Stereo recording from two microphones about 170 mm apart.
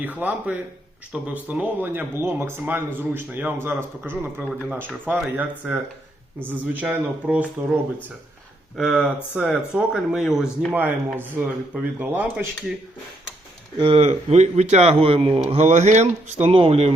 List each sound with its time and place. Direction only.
0.0 s speech: 10° right (ahead or behind)
8.7 s speech: 5° right (ahead or behind)
13.7 s a man's voice: 30° right (ahead or behind)